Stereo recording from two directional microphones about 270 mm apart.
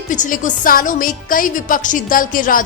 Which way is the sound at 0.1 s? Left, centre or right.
Left.